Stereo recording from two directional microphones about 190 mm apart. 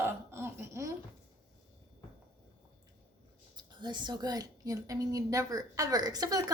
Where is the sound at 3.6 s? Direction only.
25° right (ahead or behind).